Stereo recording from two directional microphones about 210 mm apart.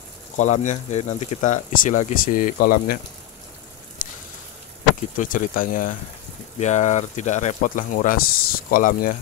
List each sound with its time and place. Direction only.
0.4 s speech: 35° left (ahead or behind)
5.1 s speech: 40° left (ahead or behind)